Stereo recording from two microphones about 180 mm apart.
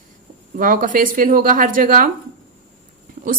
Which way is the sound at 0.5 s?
50° right (ahead or behind).